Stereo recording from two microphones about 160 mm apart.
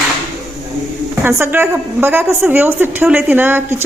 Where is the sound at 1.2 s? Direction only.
15° right (ahead or behind).